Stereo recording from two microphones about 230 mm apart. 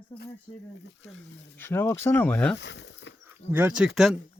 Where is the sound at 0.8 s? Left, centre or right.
Left.